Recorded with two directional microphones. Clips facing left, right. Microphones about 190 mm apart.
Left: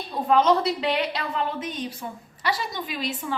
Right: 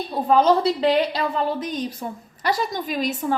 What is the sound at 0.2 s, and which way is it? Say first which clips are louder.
A woman's voice: right 3 dB; 35° right (ahead or behind).